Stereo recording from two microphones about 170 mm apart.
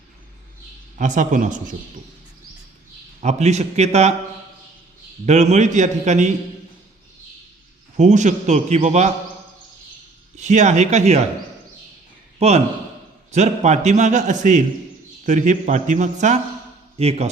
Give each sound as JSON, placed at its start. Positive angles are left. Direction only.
{"t": 0.9, "sound": "a man's voice", "side_deg": -45}
{"t": 3.2, "sound": "a man's voice", "side_deg": -40}
{"t": 5.2, "sound": "a man's voice", "side_deg": -45}
{"t": 7.9, "sound": "a man's voice", "side_deg": -45}
{"t": 10.3, "sound": "a man's voice", "side_deg": -45}
{"t": 12.4, "sound": "a man's voice", "side_deg": -40}